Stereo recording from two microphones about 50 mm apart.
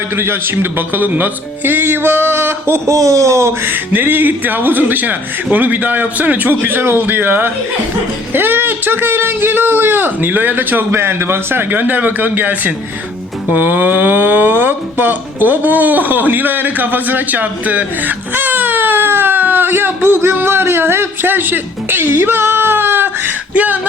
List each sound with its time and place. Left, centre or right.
0.2 s a man's voice: right
2.9 s speech: right
3.7 s a man's voice: right
11.7 s a man's voice: right
23.6 s a man's voice: right